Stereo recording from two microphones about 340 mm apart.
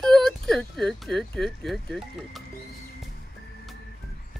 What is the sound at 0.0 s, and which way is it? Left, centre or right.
Speech, centre.